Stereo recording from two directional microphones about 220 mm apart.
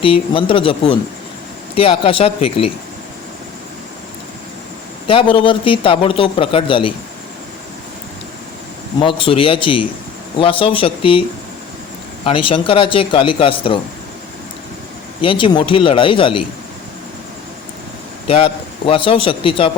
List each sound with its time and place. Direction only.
0.0 s a man's voice: 25° left (ahead or behind)
5.0 s a man's voice: 25° left (ahead or behind)
9.0 s a man's voice: 25° left (ahead or behind)
12.2 s a man's voice: 25° left (ahead or behind)
15.2 s a man's voice: 20° left (ahead or behind)
18.3 s a man's voice: 25° left (ahead or behind)